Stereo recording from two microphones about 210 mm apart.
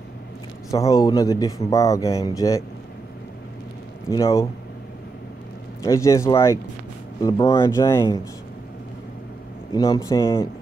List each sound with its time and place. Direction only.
0.7 s speech: 15° left (ahead or behind)
4.1 s speech: 15° left (ahead or behind)
5.9 s speech: 15° left (ahead or behind)
9.8 s speech: 15° left (ahead or behind)